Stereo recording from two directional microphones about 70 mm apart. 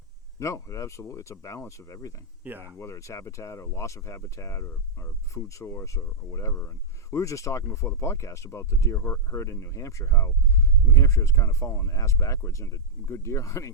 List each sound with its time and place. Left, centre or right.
0.3 s speech: left